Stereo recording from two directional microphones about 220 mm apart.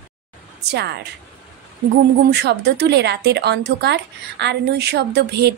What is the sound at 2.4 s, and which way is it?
Speech, 50° right (ahead or behind).